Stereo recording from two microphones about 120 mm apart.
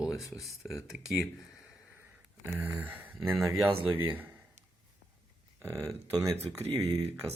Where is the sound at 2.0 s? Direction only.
15° right (ahead or behind).